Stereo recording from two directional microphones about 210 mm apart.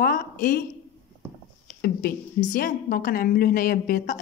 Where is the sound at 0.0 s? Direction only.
45° left (ahead or behind).